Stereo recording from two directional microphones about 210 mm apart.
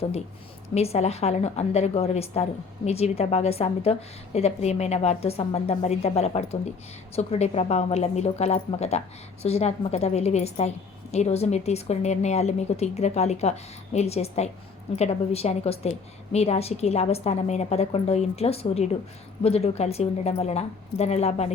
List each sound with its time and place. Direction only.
0.7 s a woman's voice: 30° left (ahead or behind)